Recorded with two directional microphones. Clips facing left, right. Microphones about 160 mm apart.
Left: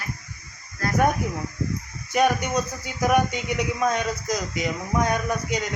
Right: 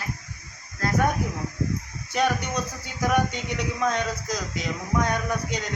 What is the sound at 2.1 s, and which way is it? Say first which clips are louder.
A man's voice: left 4 dB; 10° left (ahead or behind).